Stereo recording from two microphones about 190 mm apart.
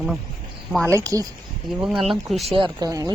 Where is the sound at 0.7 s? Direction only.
5° left (ahead or behind).